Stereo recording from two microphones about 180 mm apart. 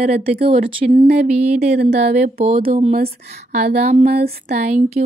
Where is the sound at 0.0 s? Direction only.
35° right (ahead or behind).